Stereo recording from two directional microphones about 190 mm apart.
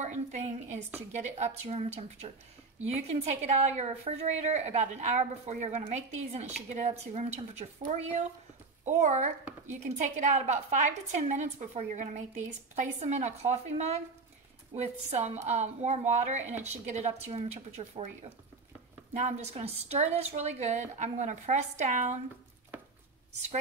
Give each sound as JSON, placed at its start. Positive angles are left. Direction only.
{"t": 0.0, "sound": "a woman's voice", "side_deg": -40}
{"t": 19.1, "sound": "a woman's voice", "side_deg": -35}